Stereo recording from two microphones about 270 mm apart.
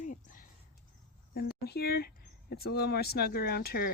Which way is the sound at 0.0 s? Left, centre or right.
Left.